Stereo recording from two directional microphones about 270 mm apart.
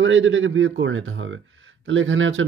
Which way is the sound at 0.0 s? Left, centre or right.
Right.